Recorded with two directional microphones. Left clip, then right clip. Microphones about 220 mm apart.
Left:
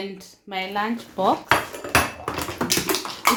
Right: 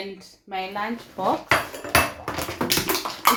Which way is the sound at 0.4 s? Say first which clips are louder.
Left 2 dB; 50° left (ahead or behind).